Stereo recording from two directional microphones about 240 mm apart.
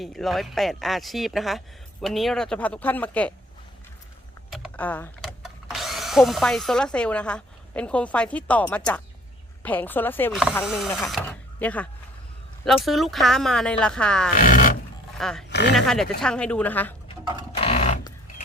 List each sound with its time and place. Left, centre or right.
0.0 s speech: centre
4.5 s a woman's voice: centre
10.9 s sewing machine: centre
12.6 s speech: centre
14.3 s grunt: left
15.2 s speech: centre
15.4 s a sound: left
15.7 s speech: centre
17.6 s a sound: left